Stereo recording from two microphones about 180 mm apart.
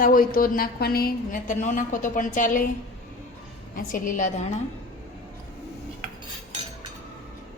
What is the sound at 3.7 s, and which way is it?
Speech, 50° left (ahead or behind).